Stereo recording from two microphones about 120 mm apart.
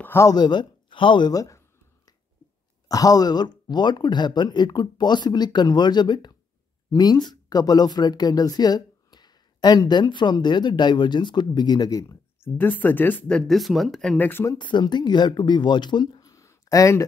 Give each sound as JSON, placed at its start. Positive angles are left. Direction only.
{"t": 0.0, "sound": "speech", "side_deg": 20}
{"t": 0.3, "sound": "speech", "side_deg": 35}
{"t": 2.9, "sound": "speech", "side_deg": 30}
{"t": 12.5, "sound": "speech", "side_deg": 15}
{"t": 13.5, "sound": "speech", "side_deg": 0}
{"t": 14.1, "sound": "speech", "side_deg": 15}
{"t": 14.6, "sound": "speech", "side_deg": 40}